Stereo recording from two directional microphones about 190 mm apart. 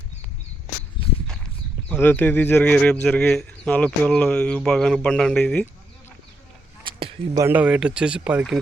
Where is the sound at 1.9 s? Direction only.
10° left (ahead or behind).